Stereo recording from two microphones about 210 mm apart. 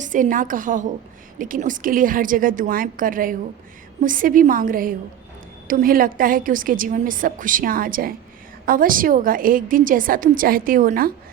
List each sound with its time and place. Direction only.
0.0 s a woman's voice: 40° right (ahead or behind)